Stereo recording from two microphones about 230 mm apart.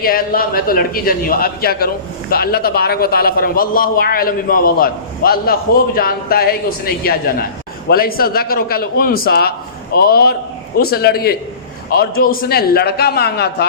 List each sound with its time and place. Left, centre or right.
0.0 s a man's voice: left